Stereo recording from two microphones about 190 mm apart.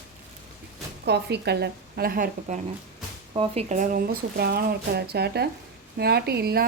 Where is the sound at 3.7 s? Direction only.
45° right (ahead or behind).